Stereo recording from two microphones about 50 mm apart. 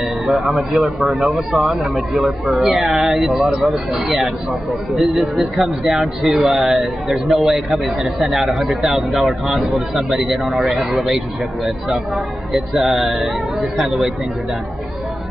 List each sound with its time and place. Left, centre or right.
0.3 s speech: centre
4.9 s speech: centre
12.7 s speech: centre